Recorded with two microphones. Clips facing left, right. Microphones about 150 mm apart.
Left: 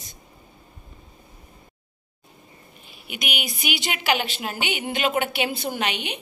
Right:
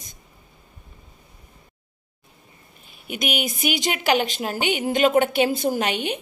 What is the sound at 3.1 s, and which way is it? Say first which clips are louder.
A woman's voice: right 6 dB; 45° right (ahead or behind).